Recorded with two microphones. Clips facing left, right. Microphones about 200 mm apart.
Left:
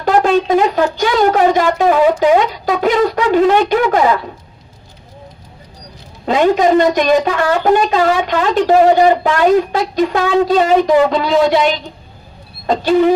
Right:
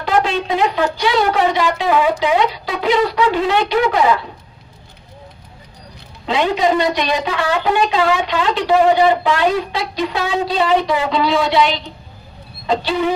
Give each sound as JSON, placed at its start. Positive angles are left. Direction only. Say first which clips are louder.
{"t": 0.0, "sound": "a woman's voice", "louder": "left 5 dB", "side_deg": 45}
{"t": 6.2, "sound": "a woman's voice", "louder": "left 5 dB", "side_deg": 45}